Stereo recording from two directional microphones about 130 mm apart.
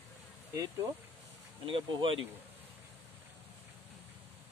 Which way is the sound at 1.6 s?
40° right (ahead or behind).